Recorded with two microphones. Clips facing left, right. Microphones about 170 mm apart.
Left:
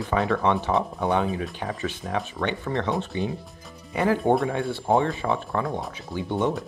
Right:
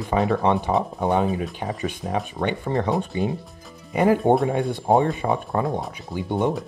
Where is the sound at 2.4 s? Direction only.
30° right (ahead or behind).